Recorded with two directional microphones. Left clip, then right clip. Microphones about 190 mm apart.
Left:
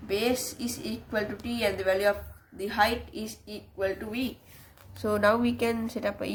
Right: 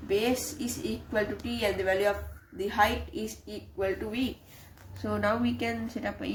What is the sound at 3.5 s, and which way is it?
Speech, 25° left (ahead or behind).